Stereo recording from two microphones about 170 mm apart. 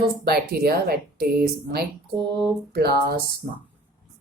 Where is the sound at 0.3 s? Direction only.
65° right (ahead or behind).